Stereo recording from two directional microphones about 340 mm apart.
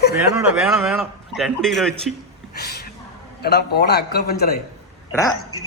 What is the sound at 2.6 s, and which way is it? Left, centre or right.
A man's voice, left.